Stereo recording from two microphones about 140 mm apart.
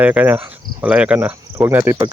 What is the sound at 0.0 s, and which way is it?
Speech, 10° right (ahead or behind).